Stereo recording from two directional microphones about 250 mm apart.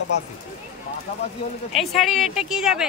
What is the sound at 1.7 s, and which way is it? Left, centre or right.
Speech, centre.